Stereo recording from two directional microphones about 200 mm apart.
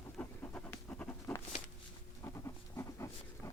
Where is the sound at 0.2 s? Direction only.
10° left (ahead or behind).